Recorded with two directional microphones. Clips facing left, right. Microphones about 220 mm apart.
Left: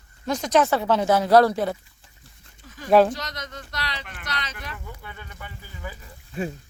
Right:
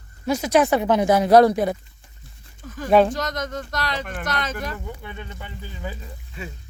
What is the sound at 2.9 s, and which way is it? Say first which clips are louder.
Speech: even; centre (ahead or behind).